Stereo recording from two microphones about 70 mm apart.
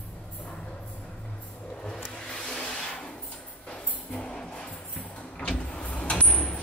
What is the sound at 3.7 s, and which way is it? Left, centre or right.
Music, centre.